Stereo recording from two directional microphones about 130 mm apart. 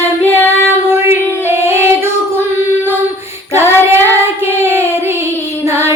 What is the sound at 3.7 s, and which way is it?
Child singing, 20° right (ahead or behind).